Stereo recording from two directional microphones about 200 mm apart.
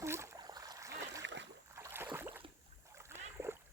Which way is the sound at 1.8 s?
10° right (ahead or behind).